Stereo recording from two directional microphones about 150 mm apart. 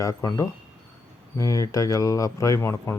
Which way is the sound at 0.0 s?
20° left (ahead or behind).